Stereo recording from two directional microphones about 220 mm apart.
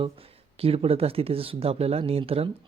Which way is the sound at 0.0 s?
25° right (ahead or behind).